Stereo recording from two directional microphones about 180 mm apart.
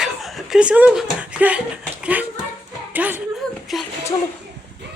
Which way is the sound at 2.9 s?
10° right (ahead or behind).